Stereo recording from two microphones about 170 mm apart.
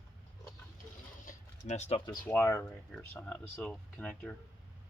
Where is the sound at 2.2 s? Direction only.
15° left (ahead or behind).